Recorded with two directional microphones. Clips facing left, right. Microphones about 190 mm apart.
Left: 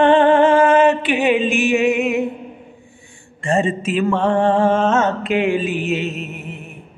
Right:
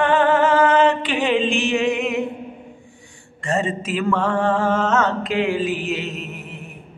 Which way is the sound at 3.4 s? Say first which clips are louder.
Left 4 dB; 25° left (ahead or behind).